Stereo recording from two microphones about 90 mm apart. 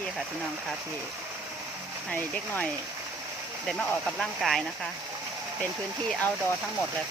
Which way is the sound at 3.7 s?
10° left (ahead or behind).